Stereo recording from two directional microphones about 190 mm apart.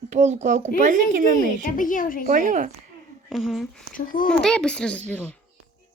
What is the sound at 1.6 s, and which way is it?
Speech, 45° left (ahead or behind).